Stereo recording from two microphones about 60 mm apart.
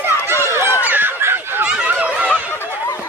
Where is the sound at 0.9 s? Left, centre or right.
Right.